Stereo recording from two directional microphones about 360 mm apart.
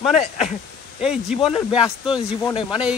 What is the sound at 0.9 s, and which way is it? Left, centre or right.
Speech, centre.